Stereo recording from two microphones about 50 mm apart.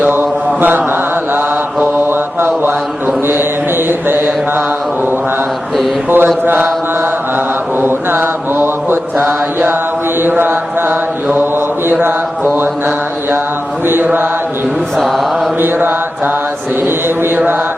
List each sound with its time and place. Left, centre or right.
0.1 s mantra: right
6.1 s mantra: right
13.8 s mantra: right
14.9 s mantra: centre
15.6 s mantra: right